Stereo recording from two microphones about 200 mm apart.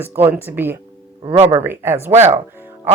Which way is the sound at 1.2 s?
25° right (ahead or behind).